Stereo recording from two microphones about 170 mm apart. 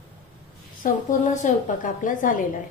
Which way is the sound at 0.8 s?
50° left (ahead or behind).